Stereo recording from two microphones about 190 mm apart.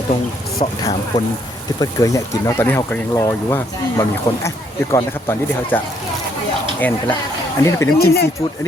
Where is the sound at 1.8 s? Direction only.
15° left (ahead or behind).